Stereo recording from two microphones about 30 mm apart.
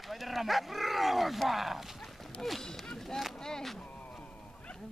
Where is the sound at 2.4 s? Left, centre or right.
Centre.